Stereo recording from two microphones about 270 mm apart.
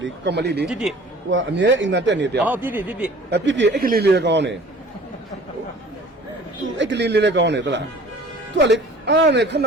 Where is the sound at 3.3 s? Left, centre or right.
Right.